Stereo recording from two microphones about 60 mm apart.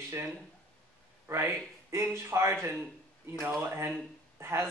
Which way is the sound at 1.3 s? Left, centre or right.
Right.